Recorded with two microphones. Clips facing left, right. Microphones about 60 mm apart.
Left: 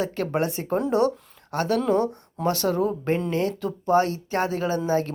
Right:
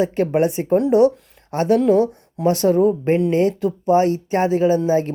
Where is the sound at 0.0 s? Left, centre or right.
Right.